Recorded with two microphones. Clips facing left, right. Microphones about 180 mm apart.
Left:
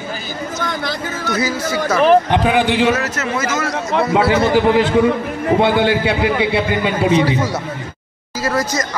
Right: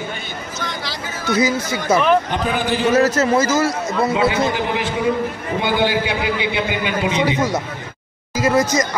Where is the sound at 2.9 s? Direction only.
35° right (ahead or behind).